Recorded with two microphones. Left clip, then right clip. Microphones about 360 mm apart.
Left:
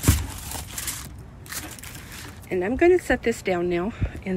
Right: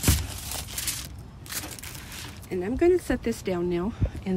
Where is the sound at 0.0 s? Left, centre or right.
Centre.